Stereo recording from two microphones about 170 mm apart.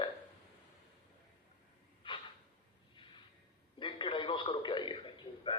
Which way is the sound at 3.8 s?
30° left (ahead or behind).